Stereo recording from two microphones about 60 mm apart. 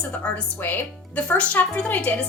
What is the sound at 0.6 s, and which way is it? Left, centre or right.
Speech, left.